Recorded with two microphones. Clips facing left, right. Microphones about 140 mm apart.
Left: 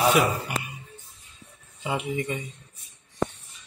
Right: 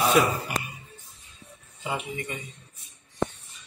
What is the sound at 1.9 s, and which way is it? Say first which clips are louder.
Speech: left 4 dB; 20° left (ahead or behind).